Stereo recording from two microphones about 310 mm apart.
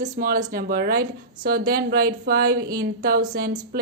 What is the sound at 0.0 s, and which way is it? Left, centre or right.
A woman's voice, right.